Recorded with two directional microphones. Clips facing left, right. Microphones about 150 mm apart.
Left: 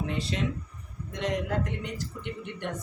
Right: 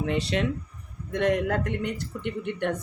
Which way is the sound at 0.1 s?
70° right (ahead or behind).